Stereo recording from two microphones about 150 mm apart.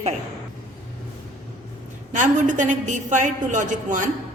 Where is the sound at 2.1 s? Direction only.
55° right (ahead or behind).